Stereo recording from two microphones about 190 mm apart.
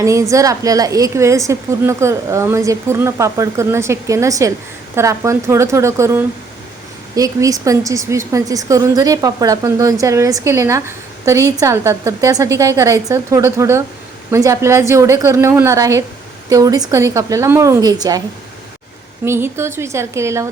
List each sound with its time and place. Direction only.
0.0 s a woman's voice: 15° right (ahead or behind)
19.2 s a woman's voice: 15° right (ahead or behind)